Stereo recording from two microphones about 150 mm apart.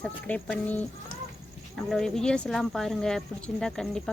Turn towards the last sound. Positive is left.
turn(degrees=5)  # may be behind; listen again after turning